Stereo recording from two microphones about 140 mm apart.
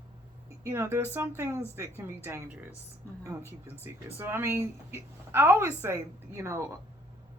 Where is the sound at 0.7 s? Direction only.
15° right (ahead or behind).